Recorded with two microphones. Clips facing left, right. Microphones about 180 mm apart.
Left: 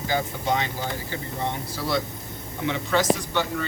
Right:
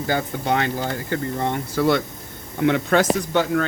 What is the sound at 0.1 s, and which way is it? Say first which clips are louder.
Speech: right 3 dB; 55° right (ahead or behind).